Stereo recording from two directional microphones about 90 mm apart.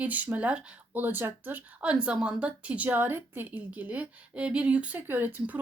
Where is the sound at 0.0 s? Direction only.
15° right (ahead or behind).